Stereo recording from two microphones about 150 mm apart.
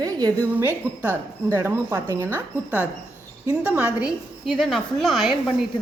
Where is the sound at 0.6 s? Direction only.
15° right (ahead or behind).